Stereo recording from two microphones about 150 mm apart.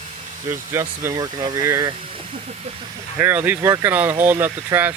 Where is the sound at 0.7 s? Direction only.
20° right (ahead or behind).